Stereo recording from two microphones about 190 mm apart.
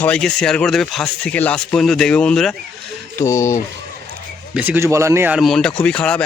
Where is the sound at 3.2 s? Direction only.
15° left (ahead or behind).